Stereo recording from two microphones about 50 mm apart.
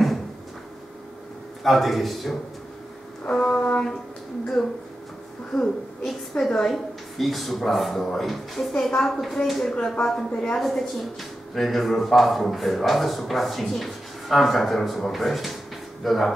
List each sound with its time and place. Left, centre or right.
1.6 s speech: centre
3.3 s music: centre
4.6 s a woman's voice: centre
6.3 s a woman's voice: centre
6.7 s a woman's voice: centre